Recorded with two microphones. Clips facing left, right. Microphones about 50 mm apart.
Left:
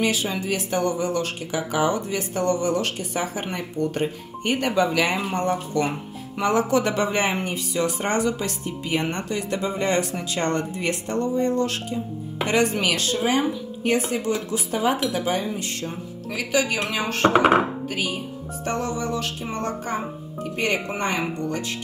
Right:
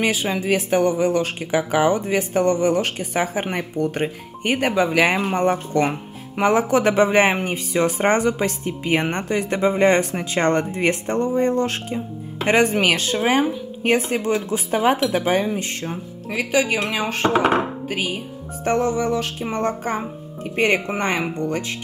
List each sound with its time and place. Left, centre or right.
0.0 s speech: right